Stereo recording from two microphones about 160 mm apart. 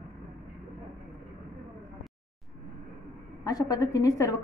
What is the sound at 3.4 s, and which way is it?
Speech, 25° left (ahead or behind).